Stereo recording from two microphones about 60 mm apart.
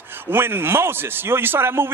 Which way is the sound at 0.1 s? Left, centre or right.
Right.